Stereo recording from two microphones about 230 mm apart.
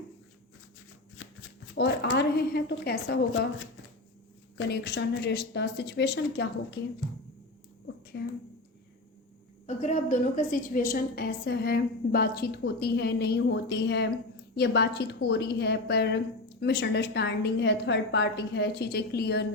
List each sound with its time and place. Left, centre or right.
1.7 s a woman's voice: left
4.5 s a woman's voice: left
8.1 s a woman's voice: left
9.6 s a woman's voice: left